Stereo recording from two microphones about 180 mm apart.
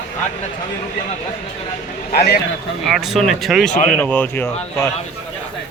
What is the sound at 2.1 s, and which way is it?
Speech, 60° left (ahead or behind).